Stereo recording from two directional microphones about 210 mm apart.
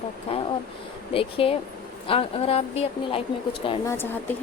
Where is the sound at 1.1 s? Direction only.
25° left (ahead or behind).